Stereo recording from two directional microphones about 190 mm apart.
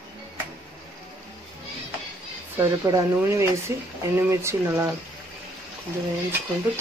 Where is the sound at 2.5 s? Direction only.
15° right (ahead or behind).